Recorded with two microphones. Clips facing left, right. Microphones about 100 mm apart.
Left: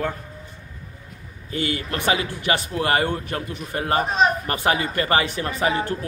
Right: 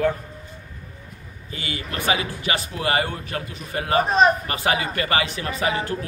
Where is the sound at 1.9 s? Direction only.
50° left (ahead or behind).